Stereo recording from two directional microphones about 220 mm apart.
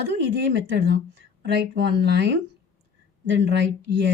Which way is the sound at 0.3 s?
50° right (ahead or behind).